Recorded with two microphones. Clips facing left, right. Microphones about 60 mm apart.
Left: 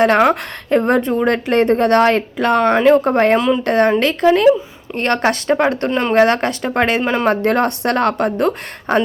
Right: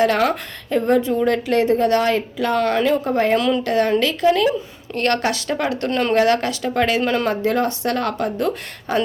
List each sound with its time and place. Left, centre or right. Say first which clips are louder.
0.0 s speech: left 5 dB; left
3.3 s speech: left 3 dB; left
3.6 s speech: left 4 dB; left
4.9 s speech: left 3 dB; left
5.9 s speech: left 2 dB; centre
6.1 s speech: left 5 dB; left
7.0 s speech: left 2 dB; left
7.3 s speech: left 4 dB; left